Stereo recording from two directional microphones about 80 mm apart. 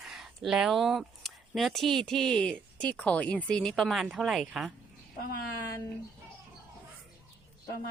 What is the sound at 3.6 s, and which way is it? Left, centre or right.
Speech, centre.